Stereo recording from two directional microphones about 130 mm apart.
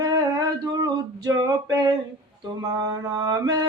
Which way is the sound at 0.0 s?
30° right (ahead or behind).